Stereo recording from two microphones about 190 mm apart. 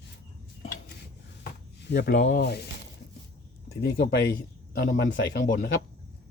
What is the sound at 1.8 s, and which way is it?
Speech, 60° left (ahead or behind).